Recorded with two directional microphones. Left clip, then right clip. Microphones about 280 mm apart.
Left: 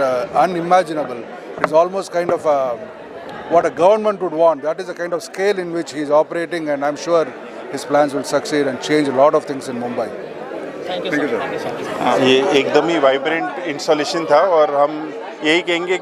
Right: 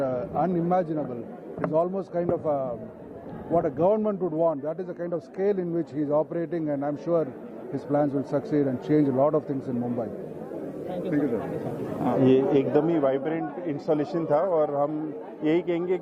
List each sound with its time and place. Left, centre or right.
0.0 s speech: centre
4.8 s speech: centre